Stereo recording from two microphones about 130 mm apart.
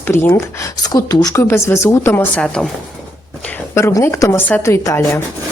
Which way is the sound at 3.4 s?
15° left (ahead or behind).